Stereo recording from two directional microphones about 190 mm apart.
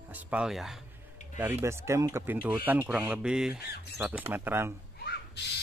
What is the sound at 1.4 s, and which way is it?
Speech, 15° right (ahead or behind).